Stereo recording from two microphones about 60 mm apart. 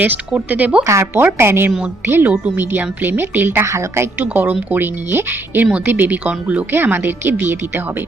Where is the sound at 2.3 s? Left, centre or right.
Right.